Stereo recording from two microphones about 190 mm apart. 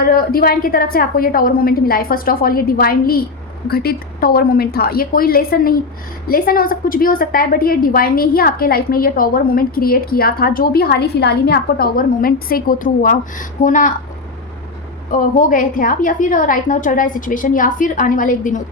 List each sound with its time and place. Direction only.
0.0 s a woman's voice: 50° left (ahead or behind)
15.1 s a woman's voice: 45° left (ahead or behind)